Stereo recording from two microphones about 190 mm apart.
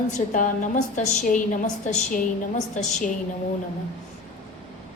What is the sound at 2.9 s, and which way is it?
Speech, 40° left (ahead or behind).